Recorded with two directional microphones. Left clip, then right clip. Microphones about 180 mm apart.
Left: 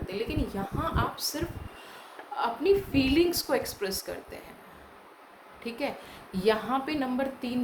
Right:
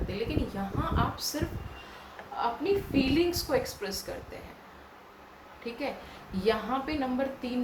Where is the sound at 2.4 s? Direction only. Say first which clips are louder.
Left 3 dB; 55° left (ahead or behind).